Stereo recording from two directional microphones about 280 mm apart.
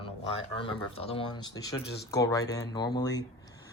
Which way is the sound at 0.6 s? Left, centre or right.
Centre.